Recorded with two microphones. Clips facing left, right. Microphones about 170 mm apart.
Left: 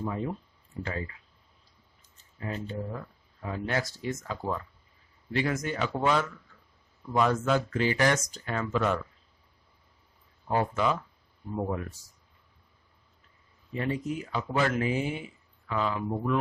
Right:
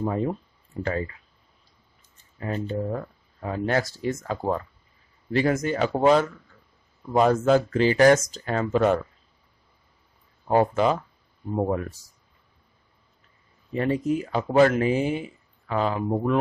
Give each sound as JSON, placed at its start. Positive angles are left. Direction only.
{"t": 0.0, "sound": "speech", "side_deg": -45}
{"t": 2.4, "sound": "speech", "side_deg": -55}
{"t": 5.3, "sound": "speech", "side_deg": -40}
{"t": 10.5, "sound": "speech", "side_deg": -35}
{"t": 13.7, "sound": "speech", "side_deg": -45}